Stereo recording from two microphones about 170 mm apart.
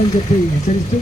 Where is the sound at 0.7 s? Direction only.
50° left (ahead or behind).